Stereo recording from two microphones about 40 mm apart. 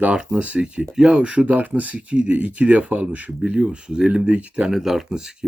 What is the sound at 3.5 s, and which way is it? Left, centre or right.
Speech, right.